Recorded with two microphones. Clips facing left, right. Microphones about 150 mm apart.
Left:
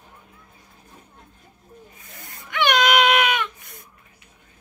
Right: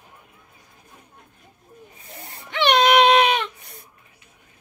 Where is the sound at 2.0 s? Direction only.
30° right (ahead or behind).